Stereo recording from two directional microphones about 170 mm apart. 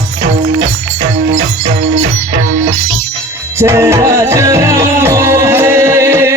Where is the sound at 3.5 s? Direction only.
15° right (ahead or behind).